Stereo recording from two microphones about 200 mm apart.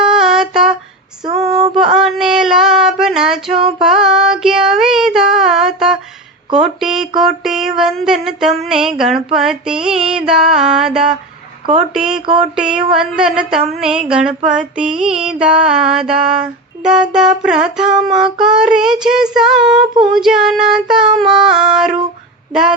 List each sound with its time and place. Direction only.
0.0 s a sound: 5° right (ahead or behind)
1.2 s female singing: 25° right (ahead or behind)
2.0 s female singing: centre (ahead or behind)
3.5 s female singing: 30° right (ahead or behind)
3.8 s female singing: 5° right (ahead or behind)
6.5 s speech: centre (ahead or behind)
7.2 s mantra: centre (ahead or behind)
19.8 s female singing: 25° right (ahead or behind)
20.1 s mantra: centre (ahead or behind)